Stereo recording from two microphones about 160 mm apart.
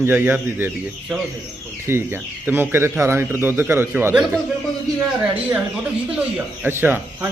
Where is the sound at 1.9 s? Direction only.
15° right (ahead or behind).